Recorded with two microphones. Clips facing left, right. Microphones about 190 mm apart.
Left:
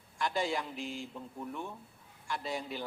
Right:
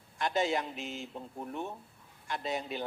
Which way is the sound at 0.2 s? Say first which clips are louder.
Right 3 dB; 20° right (ahead or behind).